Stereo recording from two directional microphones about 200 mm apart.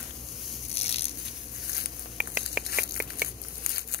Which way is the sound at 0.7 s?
30° left (ahead or behind).